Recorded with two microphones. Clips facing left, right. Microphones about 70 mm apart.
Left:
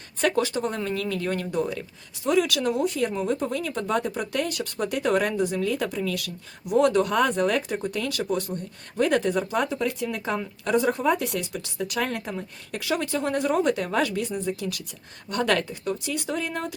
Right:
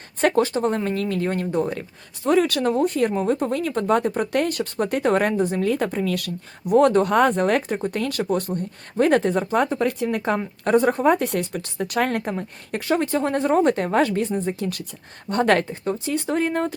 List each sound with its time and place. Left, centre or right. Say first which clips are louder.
0.2 s speech: right 4 dB; right
12.3 s speech: right 5 dB; right